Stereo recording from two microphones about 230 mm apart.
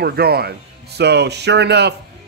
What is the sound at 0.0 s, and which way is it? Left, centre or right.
A man's voice, right.